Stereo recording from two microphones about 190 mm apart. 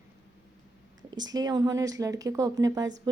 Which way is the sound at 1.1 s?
20° right (ahead or behind).